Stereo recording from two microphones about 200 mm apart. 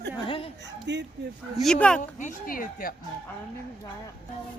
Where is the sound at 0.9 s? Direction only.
60° right (ahead or behind).